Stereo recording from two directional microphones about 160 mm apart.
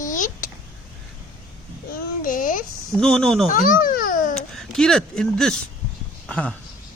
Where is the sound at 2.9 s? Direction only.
5° left (ahead or behind).